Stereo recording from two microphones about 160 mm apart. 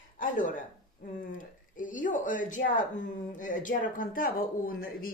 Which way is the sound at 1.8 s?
55° left (ahead or behind).